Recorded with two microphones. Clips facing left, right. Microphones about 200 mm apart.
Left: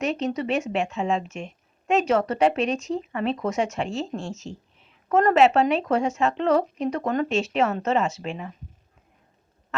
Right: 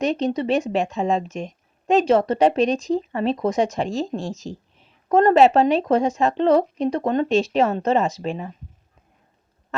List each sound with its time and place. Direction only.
0.0 s a woman's voice: 35° right (ahead or behind)